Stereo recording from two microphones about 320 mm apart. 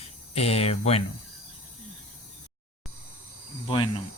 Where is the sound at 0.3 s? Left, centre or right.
Centre.